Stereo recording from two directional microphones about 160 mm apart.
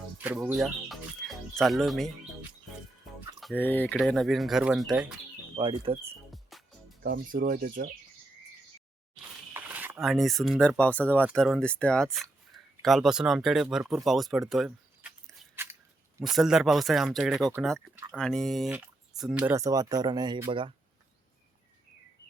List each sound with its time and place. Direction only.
0.2 s music: 10° right (ahead or behind)
3.5 s speech: 10° left (ahead or behind)
3.9 s speech: centre (ahead or behind)
5.5 s speech: 30° right (ahead or behind)
6.5 s music: centre (ahead or behind)
7.0 s speech: 65° right (ahead or behind)
9.5 s a sound: 10° right (ahead or behind)
10.0 s speech: centre (ahead or behind)
18.8 s drip: 5° right (ahead or behind)
19.5 s speech: 20° right (ahead or behind)